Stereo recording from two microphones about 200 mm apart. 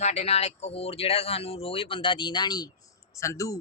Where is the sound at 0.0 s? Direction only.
30° left (ahead or behind); by 3.6 s 15° left (ahead or behind).